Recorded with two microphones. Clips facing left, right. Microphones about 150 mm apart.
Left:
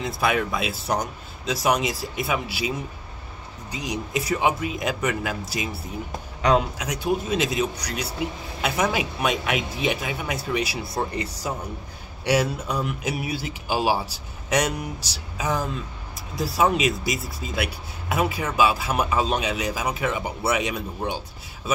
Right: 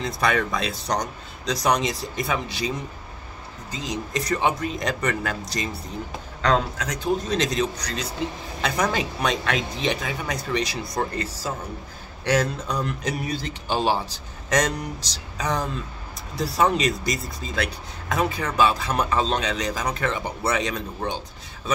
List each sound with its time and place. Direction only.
0.0 s speech: 5° left (ahead or behind)